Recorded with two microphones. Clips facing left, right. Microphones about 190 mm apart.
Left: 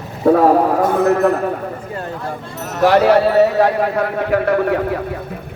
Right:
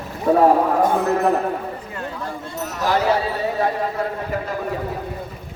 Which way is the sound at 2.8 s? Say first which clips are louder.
Left 8 dB; 70° left (ahead or behind).